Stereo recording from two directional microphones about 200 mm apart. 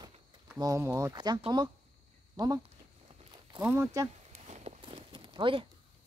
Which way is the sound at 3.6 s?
10° right (ahead or behind).